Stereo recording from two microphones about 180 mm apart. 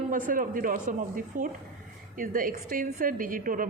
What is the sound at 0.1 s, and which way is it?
A woman's voice, 50° right (ahead or behind).